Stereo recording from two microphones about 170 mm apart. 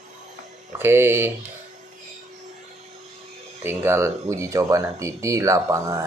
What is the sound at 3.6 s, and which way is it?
Speech, 15° right (ahead or behind).